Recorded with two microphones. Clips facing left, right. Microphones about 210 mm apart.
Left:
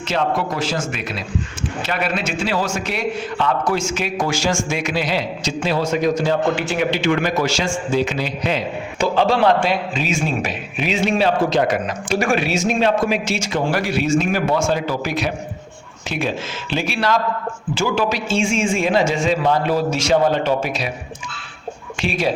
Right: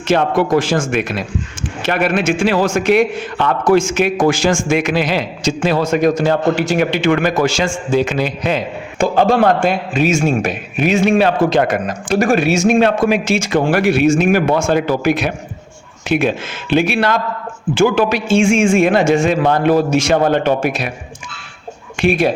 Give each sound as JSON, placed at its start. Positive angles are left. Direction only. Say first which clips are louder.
{"t": 0.1, "sound": "a man's voice", "louder": "right 8 dB", "side_deg": -50}
{"t": 12.5, "sound": "a man's voice", "louder": "right 5 dB", "side_deg": -60}
{"t": 22.0, "sound": "a man's voice", "louder": "right 8 dB", "side_deg": -55}